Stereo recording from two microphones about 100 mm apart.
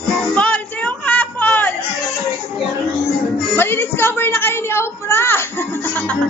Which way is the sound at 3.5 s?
20° left (ahead or behind).